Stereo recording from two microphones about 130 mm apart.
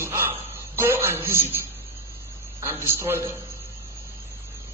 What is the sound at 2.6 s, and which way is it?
Speech, 20° right (ahead or behind).